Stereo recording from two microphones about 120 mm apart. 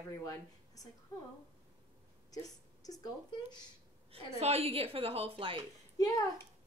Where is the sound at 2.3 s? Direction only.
30° left (ahead or behind).